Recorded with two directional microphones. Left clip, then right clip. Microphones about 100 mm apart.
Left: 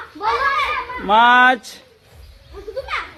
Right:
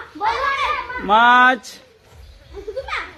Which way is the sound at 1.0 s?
15° left (ahead or behind).